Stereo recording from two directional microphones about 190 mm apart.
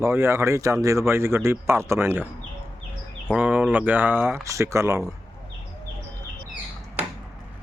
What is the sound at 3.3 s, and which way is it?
Speech, 5° right (ahead or behind).